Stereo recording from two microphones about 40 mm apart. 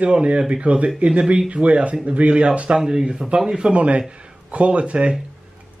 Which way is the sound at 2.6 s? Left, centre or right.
Centre.